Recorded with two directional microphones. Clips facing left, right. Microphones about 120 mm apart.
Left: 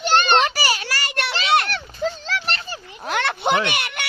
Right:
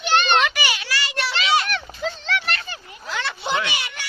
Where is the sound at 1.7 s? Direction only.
40° left (ahead or behind).